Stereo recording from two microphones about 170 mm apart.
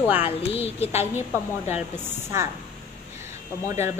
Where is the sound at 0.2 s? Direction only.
35° left (ahead or behind).